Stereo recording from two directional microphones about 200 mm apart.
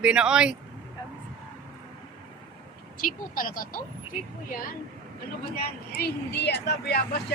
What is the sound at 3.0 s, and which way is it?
Speech, 45° left (ahead or behind).